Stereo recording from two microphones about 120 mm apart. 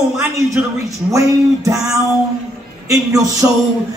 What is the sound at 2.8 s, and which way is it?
Speech, 30° right (ahead or behind).